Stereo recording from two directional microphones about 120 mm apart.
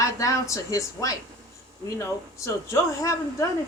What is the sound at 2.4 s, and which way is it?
A man's voice, 25° left (ahead or behind).